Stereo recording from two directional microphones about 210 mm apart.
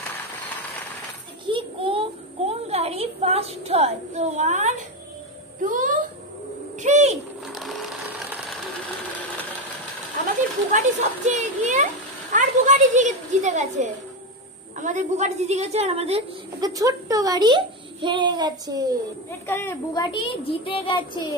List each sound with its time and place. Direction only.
1.5 s child singing: 25° right (ahead or behind)
5.6 s a child's voice: 40° right (ahead or behind)
6.8 s bird: 30° right (ahead or behind)
7.4 s sewing machine: centre (ahead or behind)
11.2 s a child's voice: 35° right (ahead or behind)
16.6 s a child's voice: 15° right (ahead or behind)
19.4 s a child's voice: 10° left (ahead or behind)